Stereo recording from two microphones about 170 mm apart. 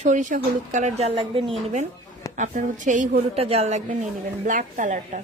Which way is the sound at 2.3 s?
45° right (ahead or behind).